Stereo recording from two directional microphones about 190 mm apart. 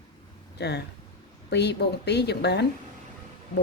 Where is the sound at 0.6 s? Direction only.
60° left (ahead or behind).